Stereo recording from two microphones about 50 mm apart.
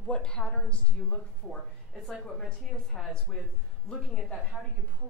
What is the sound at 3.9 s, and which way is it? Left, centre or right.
Speech, centre.